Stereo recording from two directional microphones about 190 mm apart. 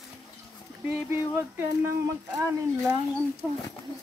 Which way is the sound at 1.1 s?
10° right (ahead or behind).